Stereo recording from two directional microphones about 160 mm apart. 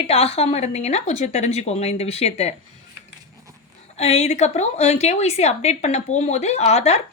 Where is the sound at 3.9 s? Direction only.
40° left (ahead or behind).